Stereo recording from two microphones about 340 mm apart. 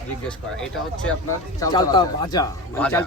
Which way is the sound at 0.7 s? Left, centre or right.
Centre.